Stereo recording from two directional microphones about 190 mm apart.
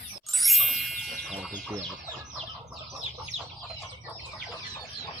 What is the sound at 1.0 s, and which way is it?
Music, centre (ahead or behind).